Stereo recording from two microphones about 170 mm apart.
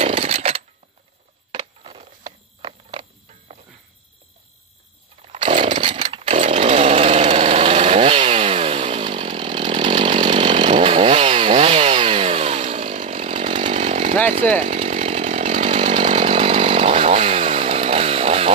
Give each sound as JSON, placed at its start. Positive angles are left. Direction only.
{"t": 0.0, "sound": "a sound", "side_deg": -40}
{"t": 5.2, "sound": "chainsaw", "side_deg": -40}
{"t": 5.8, "sound": "chainsaw", "side_deg": -30}